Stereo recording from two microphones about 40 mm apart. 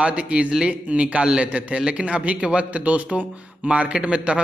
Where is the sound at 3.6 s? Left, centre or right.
Right.